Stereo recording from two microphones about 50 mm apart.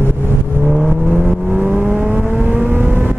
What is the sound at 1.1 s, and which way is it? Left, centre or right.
Vehicle, right.